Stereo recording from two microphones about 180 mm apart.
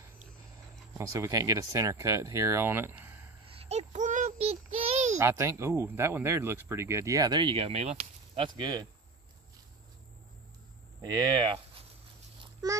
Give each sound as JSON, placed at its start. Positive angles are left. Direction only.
{"t": 0.9, "sound": "speech", "side_deg": -15}
{"t": 3.4, "sound": "child singing", "side_deg": -30}
{"t": 5.1, "sound": "speech", "side_deg": -15}
{"t": 8.4, "sound": "speech", "side_deg": -25}
{"t": 11.0, "sound": "speech", "side_deg": -20}
{"t": 12.6, "sound": "a child's voice", "side_deg": -20}